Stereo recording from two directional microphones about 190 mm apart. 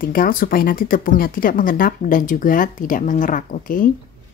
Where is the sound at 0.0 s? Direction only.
50° left (ahead or behind).